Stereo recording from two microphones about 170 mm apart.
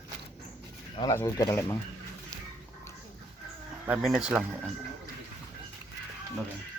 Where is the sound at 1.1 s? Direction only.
15° left (ahead or behind).